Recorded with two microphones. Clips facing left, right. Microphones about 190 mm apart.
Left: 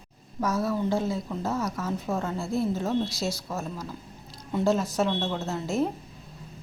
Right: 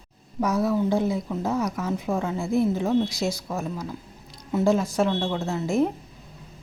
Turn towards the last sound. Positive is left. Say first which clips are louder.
# right 4 dB
turn(degrees=-15)  # may be behind; listen again after turning